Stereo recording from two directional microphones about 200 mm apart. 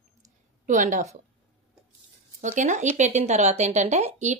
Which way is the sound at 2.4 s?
40° right (ahead or behind).